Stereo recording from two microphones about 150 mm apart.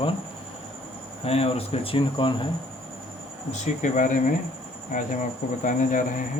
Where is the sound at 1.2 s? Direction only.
40° left (ahead or behind).